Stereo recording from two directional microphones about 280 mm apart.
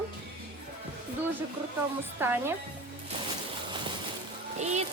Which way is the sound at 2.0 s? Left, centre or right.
Centre.